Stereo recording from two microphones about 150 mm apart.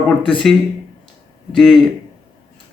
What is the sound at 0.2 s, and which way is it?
Speech, 35° left (ahead or behind).